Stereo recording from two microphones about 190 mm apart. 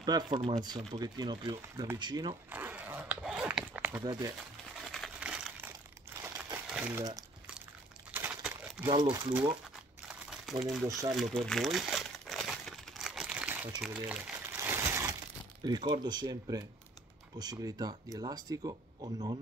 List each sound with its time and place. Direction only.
0.0 s speech: 25° right (ahead or behind)
2.5 s zipper: 10° right (ahead or behind)
4.0 s speech: 20° right (ahead or behind)
4.9 s crumpling: centre (ahead or behind)
8.8 s speech: 25° right (ahead or behind)
10.6 s speech: centre (ahead or behind)
10.9 s speech: 20° right (ahead or behind)
11.1 s crumpling: 5° left (ahead or behind); by 15.1 s 15° right (ahead or behind)
15.6 s speech: 20° right (ahead or behind)